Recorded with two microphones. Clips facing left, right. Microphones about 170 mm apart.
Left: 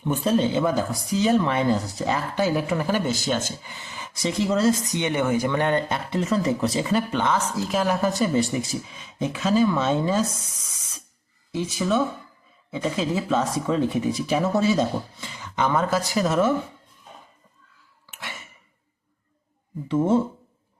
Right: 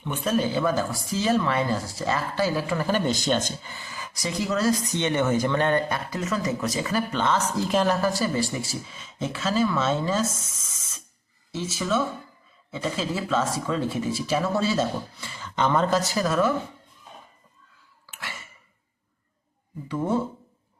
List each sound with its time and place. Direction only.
0.0 s speech: 40° left (ahead or behind)
0.3 s a woman's voice: 20° left (ahead or behind); by 7.9 s 5° left (ahead or behind)
8.0 s speech: 20° left (ahead or behind)
11.5 s speech: 15° left (ahead or behind)
18.1 s a sound: 20° left (ahead or behind)
19.9 s speech: 25° left (ahead or behind)